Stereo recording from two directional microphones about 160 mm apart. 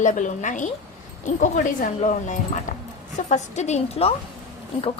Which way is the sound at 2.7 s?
55° left (ahead or behind).